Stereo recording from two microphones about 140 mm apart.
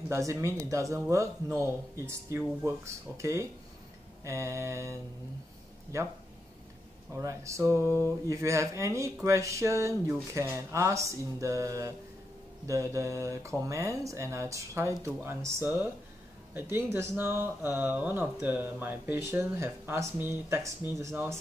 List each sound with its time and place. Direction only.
0.1 s speech: 20° right (ahead or behind)
5.9 s speech: 20° right (ahead or behind)
7.2 s speech: 20° right (ahead or behind)